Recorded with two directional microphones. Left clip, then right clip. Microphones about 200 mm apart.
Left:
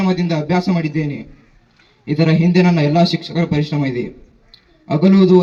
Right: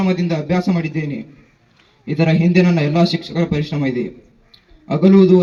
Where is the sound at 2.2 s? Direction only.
50° left (ahead or behind).